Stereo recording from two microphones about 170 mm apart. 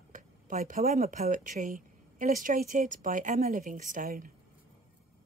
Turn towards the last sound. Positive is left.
turn(degrees=-55)  # may be behind; listen again after turning